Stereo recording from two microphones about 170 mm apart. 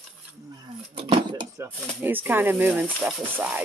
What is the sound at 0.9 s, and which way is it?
Speech, 30° right (ahead or behind).